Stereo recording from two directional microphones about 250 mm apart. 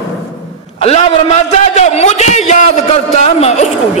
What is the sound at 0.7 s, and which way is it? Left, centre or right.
A man's voice, left.